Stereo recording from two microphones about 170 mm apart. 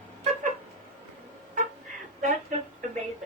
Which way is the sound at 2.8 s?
45° right (ahead or behind).